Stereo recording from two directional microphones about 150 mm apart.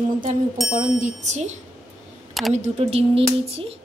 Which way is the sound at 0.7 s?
55° right (ahead or behind).